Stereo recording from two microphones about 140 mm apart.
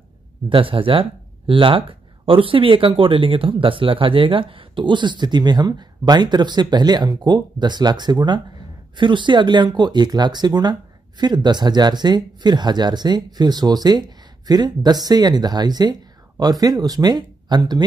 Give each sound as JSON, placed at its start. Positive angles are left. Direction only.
{"t": 0.5, "sound": "speech", "side_deg": -40}